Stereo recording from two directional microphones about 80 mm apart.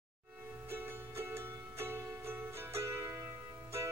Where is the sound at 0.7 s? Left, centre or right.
Right.